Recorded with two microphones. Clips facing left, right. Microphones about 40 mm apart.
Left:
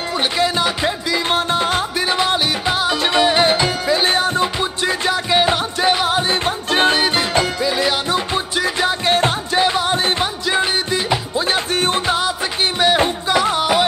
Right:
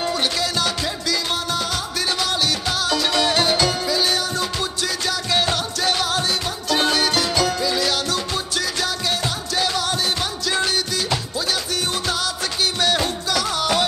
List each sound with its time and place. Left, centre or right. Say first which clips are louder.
0.2 s music: left 4 dB; left